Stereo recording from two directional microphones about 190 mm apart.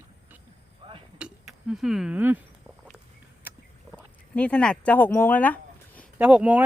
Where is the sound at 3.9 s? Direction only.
5° left (ahead or behind).